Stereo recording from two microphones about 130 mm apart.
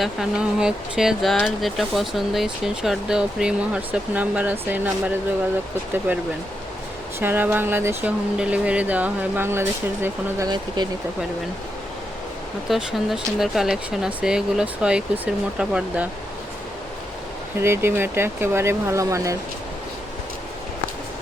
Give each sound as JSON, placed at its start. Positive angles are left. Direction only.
{"t": 0.0, "sound": "speech", "side_deg": -5}
{"t": 10.8, "sound": "speech", "side_deg": -35}
{"t": 12.6, "sound": "speech", "side_deg": 0}
{"t": 17.6, "sound": "speech", "side_deg": -20}